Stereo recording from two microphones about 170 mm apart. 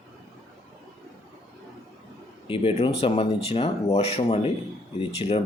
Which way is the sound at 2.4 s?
35° left (ahead or behind).